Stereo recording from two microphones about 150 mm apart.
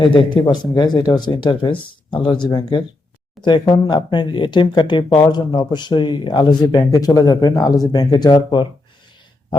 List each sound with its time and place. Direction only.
0.0 s speech: 35° left (ahead or behind)